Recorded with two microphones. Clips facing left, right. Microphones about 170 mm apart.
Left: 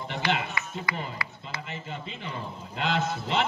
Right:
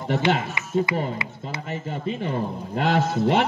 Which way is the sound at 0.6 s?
20° right (ahead or behind).